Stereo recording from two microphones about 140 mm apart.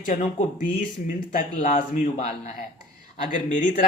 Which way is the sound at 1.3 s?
70° left (ahead or behind).